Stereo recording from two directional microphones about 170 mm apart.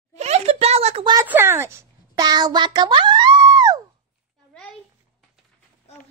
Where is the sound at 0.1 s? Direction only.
40° right (ahead or behind).